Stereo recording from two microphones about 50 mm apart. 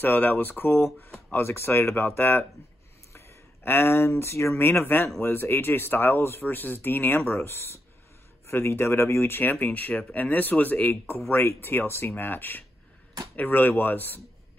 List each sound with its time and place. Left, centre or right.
0.0 s speech: left
1.3 s speech: left
3.1 s a sound: left
4.1 s speech: left
4.6 s speech: left
9.4 s speech: left